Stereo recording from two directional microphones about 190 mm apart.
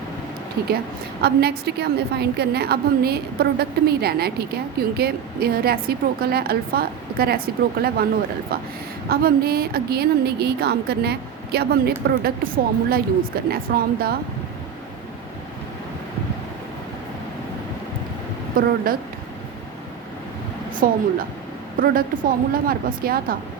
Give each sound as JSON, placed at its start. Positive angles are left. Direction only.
{"t": 0.6, "sound": "a woman's voice", "side_deg": -55}
{"t": 9.0, "sound": "a woman's voice", "side_deg": -55}
{"t": 20.7, "sound": "a woman's voice", "side_deg": -45}